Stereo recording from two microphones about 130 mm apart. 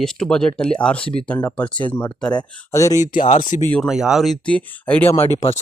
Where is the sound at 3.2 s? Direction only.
70° left (ahead or behind).